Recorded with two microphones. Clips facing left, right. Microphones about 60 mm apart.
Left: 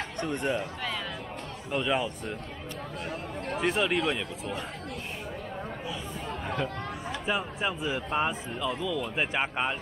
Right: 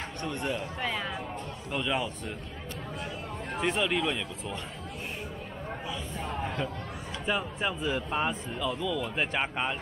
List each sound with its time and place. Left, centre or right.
0.2 s speech: left
1.7 s speech: centre
3.5 s speech: centre
6.4 s chatter: centre
7.2 s speech: centre